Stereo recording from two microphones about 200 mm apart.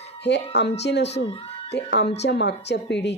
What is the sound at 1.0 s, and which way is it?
Speech, 30° left (ahead or behind).